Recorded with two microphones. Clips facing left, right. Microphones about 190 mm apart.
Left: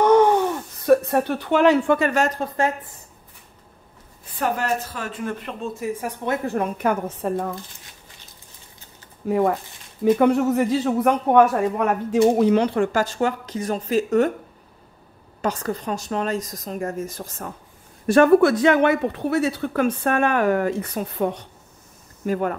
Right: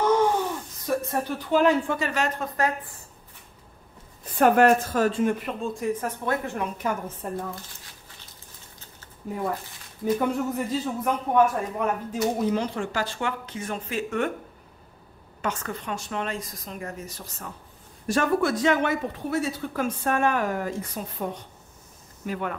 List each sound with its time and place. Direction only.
0.0 s a sound: 65° left (ahead or behind)
0.8 s speech: 65° left (ahead or behind); by 2.7 s 30° left (ahead or behind)
4.4 s a woman's voice: 55° right (ahead or behind)
5.4 s speech: centre (ahead or behind)
6.4 s a woman's voice: 40° left (ahead or behind)
6.8 s a man's voice: 70° left (ahead or behind)
9.3 s a man's voice: 85° left; by 14.3 s 40° left (ahead or behind)
15.4 s a woman's voice: 35° left (ahead or behind)
18.0 s speech: 60° left (ahead or behind)
22.2 s speech: 45° left (ahead or behind)